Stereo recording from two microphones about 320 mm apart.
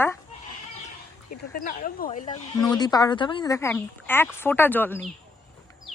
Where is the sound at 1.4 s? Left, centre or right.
Left.